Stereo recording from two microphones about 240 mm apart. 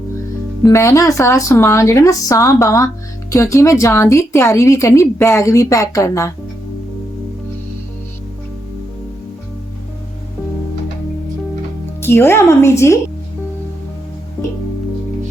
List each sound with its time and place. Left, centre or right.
0.6 s speech: centre
12.0 s speech: centre